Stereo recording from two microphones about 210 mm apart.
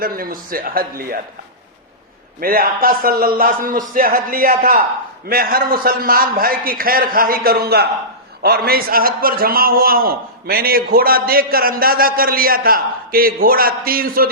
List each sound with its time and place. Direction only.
0.0 s a man's voice: 45° right (ahead or behind)
2.4 s a man's voice: 45° right (ahead or behind)